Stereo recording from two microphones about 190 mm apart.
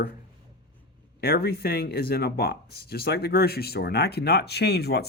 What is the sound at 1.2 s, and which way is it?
Speech, 55° left (ahead or behind).